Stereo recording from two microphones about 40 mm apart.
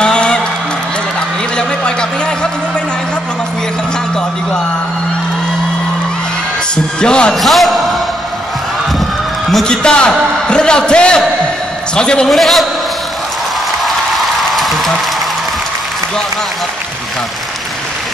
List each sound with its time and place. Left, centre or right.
0.0 s music: left
1.6 s a sound: left
7.0 s a man's voice: left
7.3 s speech: centre
9.7 s a man's voice: left
12.3 s a man's voice: centre
13.8 s music: centre